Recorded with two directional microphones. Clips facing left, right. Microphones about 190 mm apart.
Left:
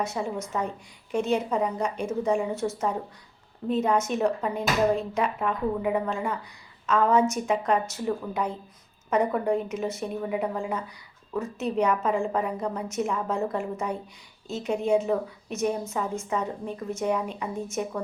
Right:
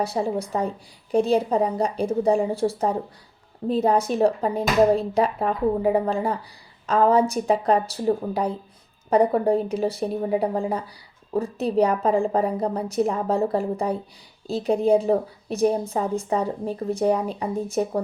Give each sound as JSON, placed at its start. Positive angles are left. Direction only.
{"t": 0.0, "sound": "a woman's voice", "side_deg": -35}